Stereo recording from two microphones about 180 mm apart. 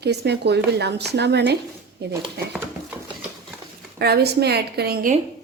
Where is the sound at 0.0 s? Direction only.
65° right (ahead or behind).